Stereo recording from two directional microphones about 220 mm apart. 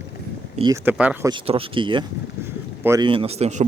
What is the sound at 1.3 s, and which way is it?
Speech, 25° right (ahead or behind).